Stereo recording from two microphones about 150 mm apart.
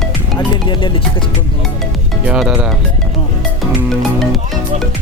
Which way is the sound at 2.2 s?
5° right (ahead or behind).